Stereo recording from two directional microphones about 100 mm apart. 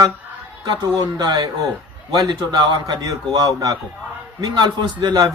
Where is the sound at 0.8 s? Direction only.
40° right (ahead or behind).